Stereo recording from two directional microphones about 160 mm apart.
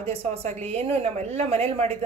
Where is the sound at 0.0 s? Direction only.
35° right (ahead or behind).